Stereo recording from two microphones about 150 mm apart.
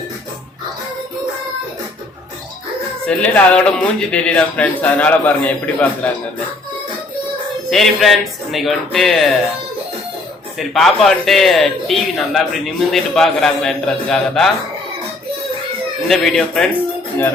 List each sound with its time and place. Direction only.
3.1 s speech: 10° left (ahead or behind)
7.7 s speech: centre (ahead or behind)
10.6 s speech: centre (ahead or behind)
16.0 s speech: centre (ahead or behind)